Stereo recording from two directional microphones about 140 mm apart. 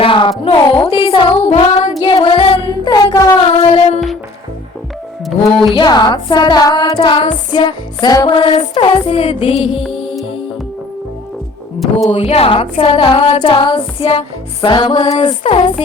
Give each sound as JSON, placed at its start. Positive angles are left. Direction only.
{"t": 0.0, "sound": "music", "side_deg": 40}
{"t": 1.5, "sound": "child singing", "side_deg": 50}
{"t": 2.0, "sound": "music", "side_deg": 35}
{"t": 2.6, "sound": "music", "side_deg": 30}
{"t": 3.4, "sound": "child singing", "side_deg": 45}
{"t": 5.2, "sound": "music", "side_deg": 0}
{"t": 5.7, "sound": "music", "side_deg": 30}
{"t": 11.8, "sound": "a sound", "side_deg": 0}
{"t": 12.1, "sound": "a sound", "side_deg": 45}
{"t": 13.4, "sound": "music", "side_deg": 40}